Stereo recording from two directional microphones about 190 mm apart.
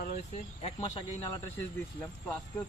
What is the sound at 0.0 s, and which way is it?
Cricket, 45° left (ahead or behind).